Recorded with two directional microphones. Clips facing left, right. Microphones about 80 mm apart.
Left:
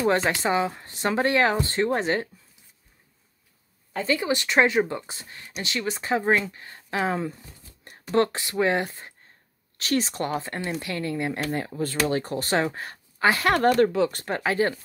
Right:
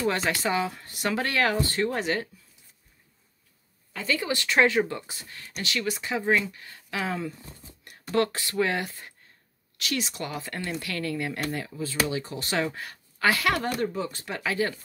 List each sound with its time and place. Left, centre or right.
0.0 s speech: left
3.9 s speech: left
11.5 s speech: left
11.8 s speech: left
13.6 s speech: left
13.9 s speech: left
14.2 s speech: left